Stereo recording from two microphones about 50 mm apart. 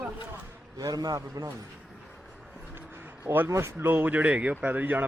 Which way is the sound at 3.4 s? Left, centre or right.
Right.